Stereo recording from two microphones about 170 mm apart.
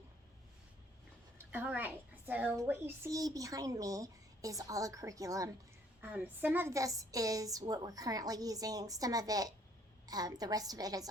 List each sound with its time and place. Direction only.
1.4 s a child's voice: 10° right (ahead or behind)